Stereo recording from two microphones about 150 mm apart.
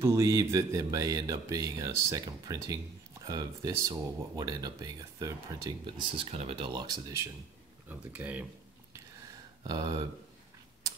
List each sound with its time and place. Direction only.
0.0 s speech: 20° right (ahead or behind)
6.1 s speech: 40° right (ahead or behind)
7.9 s speech: 10° right (ahead or behind)
9.7 s speech: 25° right (ahead or behind)